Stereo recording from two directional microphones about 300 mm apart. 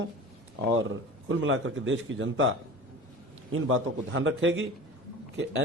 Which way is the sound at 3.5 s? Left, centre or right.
Right.